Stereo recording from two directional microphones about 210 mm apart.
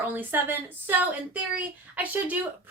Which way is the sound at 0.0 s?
10° right (ahead or behind).